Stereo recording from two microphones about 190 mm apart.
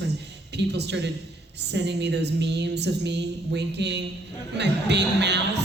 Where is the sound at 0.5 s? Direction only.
60° right (ahead or behind).